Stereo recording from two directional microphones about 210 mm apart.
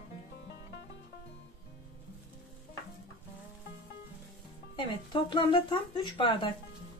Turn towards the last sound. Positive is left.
turn(degrees=25)  # may be behind; listen again after turning